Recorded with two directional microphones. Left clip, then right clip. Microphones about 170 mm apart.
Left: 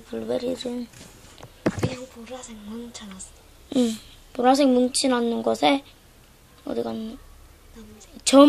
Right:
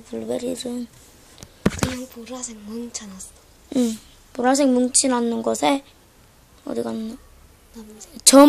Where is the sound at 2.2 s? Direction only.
40° right (ahead or behind).